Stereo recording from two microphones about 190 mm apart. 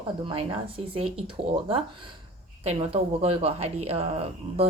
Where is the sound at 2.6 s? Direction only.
35° right (ahead or behind).